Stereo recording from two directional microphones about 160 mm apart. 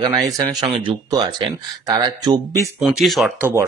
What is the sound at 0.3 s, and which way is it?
Speech, 25° right (ahead or behind).